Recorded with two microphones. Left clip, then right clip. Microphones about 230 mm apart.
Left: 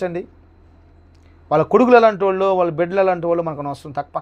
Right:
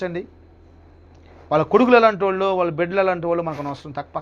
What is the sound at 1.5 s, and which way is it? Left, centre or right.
A man's voice, left.